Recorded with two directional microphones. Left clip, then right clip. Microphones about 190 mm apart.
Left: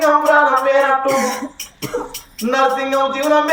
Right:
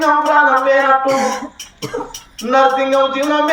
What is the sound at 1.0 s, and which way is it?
Cough, 35° left (ahead or behind).